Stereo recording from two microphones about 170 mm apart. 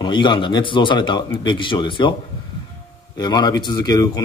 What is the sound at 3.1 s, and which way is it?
Speech, 25° left (ahead or behind).